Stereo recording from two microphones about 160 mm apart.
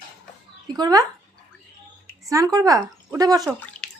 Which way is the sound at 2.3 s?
20° right (ahead or behind).